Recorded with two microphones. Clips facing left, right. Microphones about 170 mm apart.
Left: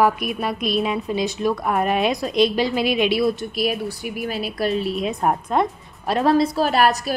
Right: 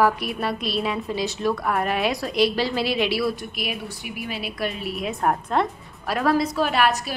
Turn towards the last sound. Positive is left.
turn(degrees=40)  # may be behind; listen again after turning